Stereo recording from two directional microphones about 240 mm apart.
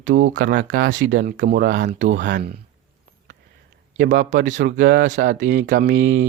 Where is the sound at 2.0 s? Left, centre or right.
Right.